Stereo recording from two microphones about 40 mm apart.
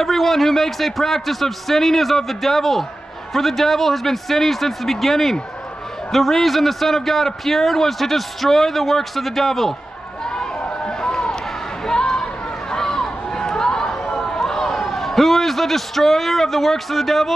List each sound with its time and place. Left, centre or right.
0.0 s a man's voice: centre
10.3 s run: centre
11.8 s a sound: centre
12.7 s run: centre